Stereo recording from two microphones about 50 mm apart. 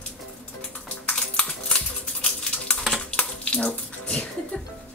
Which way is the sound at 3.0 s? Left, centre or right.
Left.